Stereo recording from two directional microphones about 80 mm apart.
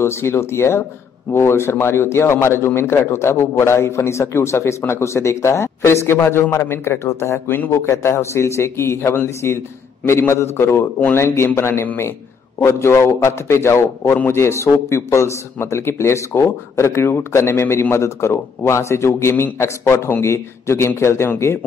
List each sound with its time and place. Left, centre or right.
0.0 s a man's voice: left